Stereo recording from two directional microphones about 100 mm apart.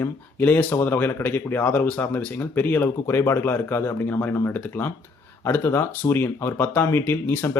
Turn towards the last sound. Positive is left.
turn(degrees=20)  # may be behind; listen again after turning